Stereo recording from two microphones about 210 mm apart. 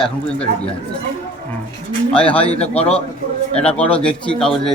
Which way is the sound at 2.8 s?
30° left (ahead or behind).